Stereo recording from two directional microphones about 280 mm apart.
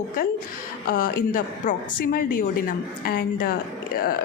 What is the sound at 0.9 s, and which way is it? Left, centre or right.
Speech, left.